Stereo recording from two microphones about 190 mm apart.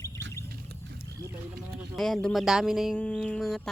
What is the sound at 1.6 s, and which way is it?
Speech, centre (ahead or behind).